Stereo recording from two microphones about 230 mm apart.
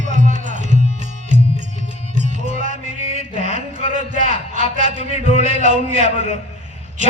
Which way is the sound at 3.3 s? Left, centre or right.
Right.